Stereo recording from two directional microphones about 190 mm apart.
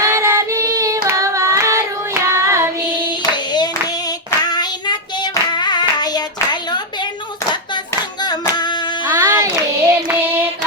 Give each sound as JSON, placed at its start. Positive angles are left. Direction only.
{"t": 0.0, "sound": "child singing", "side_deg": -15}
{"t": 3.1, "sound": "clapping", "side_deg": 25}
{"t": 4.3, "sound": "child singing", "side_deg": 20}
{"t": 6.0, "sound": "hands", "side_deg": 20}
{"t": 8.2, "sound": "singing", "side_deg": 20}
{"t": 9.0, "sound": "child singing", "side_deg": -15}